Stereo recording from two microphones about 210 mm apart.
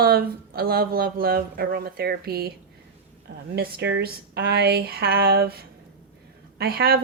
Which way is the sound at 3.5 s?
50° right (ahead or behind).